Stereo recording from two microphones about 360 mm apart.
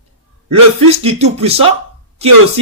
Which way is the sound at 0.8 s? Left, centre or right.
Centre.